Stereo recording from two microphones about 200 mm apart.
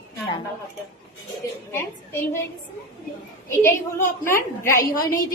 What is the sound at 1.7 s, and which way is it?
Speech, 10° left (ahead or behind).